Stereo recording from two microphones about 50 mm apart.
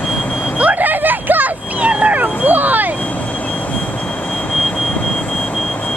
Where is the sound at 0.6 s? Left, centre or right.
Right.